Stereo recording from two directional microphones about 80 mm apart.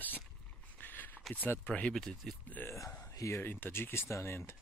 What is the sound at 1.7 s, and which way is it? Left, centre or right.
Speech, centre.